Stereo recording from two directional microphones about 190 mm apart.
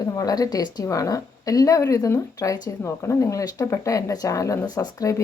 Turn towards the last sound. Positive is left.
turn(degrees=15)  # may be behind; listen again after turning